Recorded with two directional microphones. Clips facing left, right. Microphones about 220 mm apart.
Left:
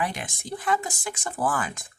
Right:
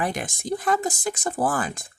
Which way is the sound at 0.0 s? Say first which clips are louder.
Right 3 dB; 45° right (ahead or behind).